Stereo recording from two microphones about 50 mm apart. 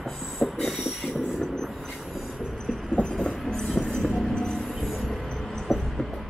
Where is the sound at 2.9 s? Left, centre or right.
Left.